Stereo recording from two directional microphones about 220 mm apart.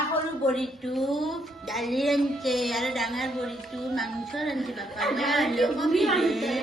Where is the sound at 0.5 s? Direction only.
Centre (ahead or behind).